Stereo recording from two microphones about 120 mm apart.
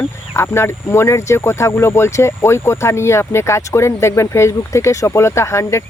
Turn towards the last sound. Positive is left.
turn(degrees=25)  # may be behind; listen again after turning